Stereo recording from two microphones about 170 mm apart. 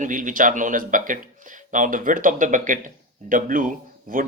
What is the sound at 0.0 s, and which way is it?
Speech, 50° right (ahead or behind).